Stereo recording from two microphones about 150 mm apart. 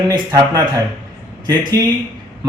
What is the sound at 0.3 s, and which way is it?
Speech, 25° right (ahead or behind).